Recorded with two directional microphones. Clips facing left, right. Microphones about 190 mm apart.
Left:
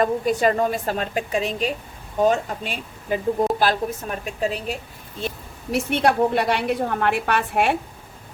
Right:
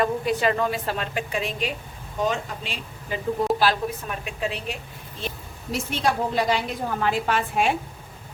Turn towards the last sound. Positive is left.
turn(degrees=65)  # may be behind; listen again after turning